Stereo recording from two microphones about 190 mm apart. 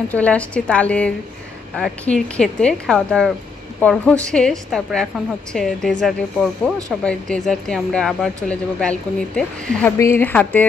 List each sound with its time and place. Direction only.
0.1 s a woman's voice: 5° left (ahead or behind)